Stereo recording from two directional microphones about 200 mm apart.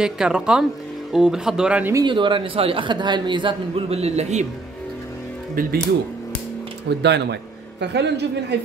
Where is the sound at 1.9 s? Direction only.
25° right (ahead or behind).